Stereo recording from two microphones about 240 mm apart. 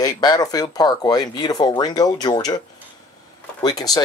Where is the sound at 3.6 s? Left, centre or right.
Centre.